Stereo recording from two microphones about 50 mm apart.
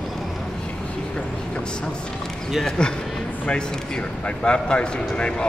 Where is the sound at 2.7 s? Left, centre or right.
Centre.